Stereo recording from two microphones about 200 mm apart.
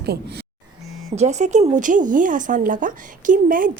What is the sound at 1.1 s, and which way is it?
Speech, 35° right (ahead or behind).